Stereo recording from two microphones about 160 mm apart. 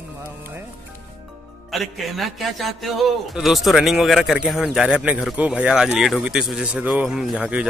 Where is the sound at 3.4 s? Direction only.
Centre (ahead or behind).